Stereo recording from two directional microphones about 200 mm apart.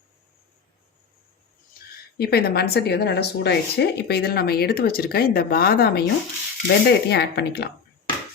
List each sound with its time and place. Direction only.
2.1 s speech: 50° left (ahead or behind)